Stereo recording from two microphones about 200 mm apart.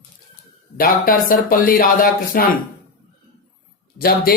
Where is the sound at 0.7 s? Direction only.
45° left (ahead or behind).